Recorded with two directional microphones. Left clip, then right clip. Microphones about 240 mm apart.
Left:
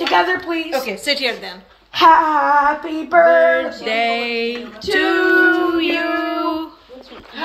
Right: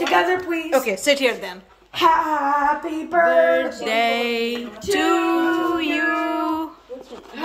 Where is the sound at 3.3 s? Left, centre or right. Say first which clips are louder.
Left 3 dB; centre.